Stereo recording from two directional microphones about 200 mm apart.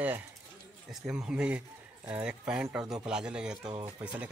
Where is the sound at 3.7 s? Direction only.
25° right (ahead or behind).